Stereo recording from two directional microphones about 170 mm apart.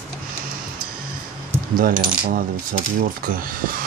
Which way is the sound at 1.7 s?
55° right (ahead or behind).